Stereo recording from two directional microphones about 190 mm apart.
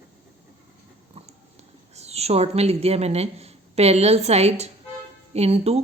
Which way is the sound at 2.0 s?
35° right (ahead or behind).